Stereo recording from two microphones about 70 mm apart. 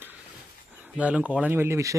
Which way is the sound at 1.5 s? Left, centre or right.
Right.